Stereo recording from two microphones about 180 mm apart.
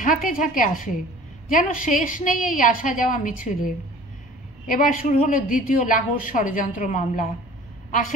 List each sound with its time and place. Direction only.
0.0 s a woman's voice: 50° left (ahead or behind)
4.6 s a woman's voice: 45° left (ahead or behind)